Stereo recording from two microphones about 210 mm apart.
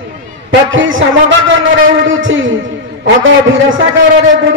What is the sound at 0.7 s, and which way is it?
A man's voice, 65° right (ahead or behind).